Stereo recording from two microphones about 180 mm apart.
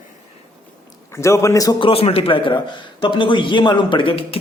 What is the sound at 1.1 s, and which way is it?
A man's voice, 15° left (ahead or behind).